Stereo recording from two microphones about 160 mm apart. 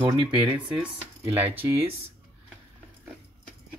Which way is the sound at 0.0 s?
10° right (ahead or behind).